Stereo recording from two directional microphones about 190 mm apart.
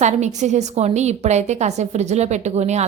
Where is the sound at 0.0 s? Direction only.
40° right (ahead or behind).